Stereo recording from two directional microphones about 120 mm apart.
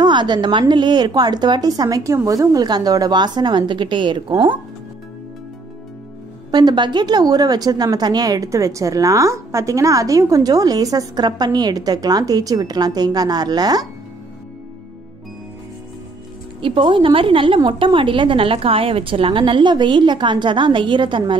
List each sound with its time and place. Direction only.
0.0 s a woman's voice: 40° right (ahead or behind)
6.5 s a woman's voice: 40° right (ahead or behind)
16.6 s a woman's voice: 45° right (ahead or behind)